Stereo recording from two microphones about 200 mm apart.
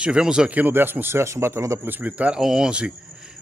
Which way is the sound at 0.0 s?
5° right (ahead or behind).